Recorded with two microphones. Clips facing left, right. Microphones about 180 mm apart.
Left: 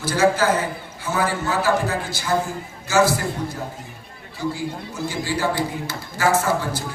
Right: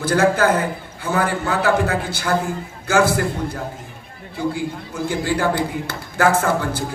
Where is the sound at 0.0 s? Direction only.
55° right (ahead or behind).